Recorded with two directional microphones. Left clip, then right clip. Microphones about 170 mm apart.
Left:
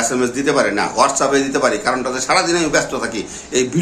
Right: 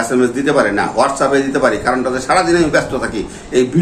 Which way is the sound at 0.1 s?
15° left (ahead or behind).